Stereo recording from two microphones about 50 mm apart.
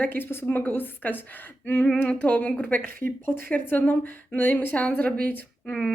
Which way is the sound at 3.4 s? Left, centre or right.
Left.